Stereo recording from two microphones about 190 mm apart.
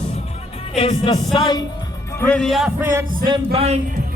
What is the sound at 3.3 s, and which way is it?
Speech, 30° right (ahead or behind).